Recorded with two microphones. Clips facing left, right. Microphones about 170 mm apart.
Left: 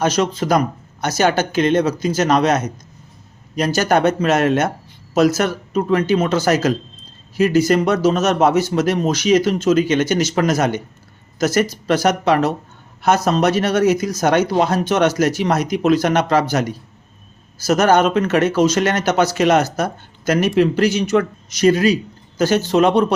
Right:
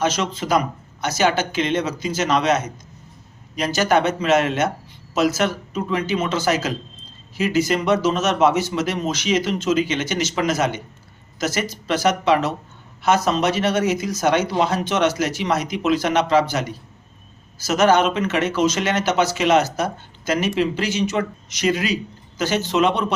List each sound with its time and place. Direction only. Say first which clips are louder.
0.0 s speech: left 4 dB; 50° left (ahead or behind)
5.7 s speech: left 6 dB; 50° left (ahead or behind)
6.2 s speech: left 5 dB; 40° left (ahead or behind)
19.8 s speech: left 3 dB; 60° left (ahead or behind); by 23.1 s 40° left (ahead or behind)